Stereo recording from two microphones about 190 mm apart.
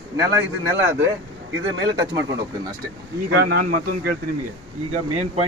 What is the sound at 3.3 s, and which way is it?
Speech, 60° right (ahead or behind).